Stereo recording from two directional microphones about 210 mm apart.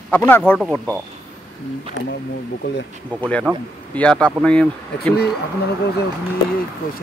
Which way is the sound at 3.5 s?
5° right (ahead or behind).